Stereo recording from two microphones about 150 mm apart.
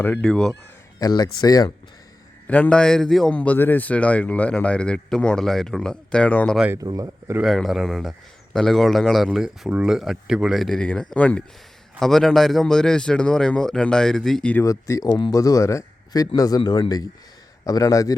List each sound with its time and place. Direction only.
0.0 s speech: 10° left (ahead or behind)
0.9 s speech: 25° left (ahead or behind)
2.5 s a man's voice: 10° left (ahead or behind)
6.7 s speech: 25° right (ahead or behind)
7.4 s a man's voice: centre (ahead or behind)
14.6 s speech: 20° left (ahead or behind)